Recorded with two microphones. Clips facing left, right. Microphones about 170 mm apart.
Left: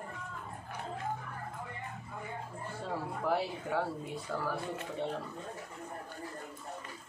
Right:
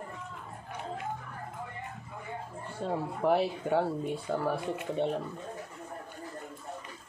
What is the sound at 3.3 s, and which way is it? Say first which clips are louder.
Speech: right 6 dB; 25° right (ahead or behind).